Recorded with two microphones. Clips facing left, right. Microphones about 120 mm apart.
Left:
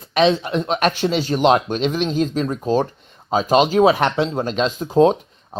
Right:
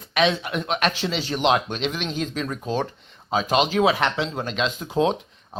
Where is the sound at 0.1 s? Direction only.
35° left (ahead or behind).